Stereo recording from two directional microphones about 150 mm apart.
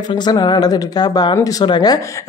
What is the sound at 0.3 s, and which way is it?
Speech, 30° left (ahead or behind).